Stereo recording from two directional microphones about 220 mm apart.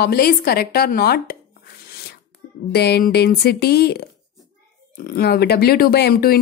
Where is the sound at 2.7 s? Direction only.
45° left (ahead or behind).